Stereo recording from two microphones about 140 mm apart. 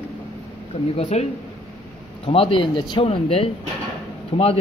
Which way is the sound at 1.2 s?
55° left (ahead or behind).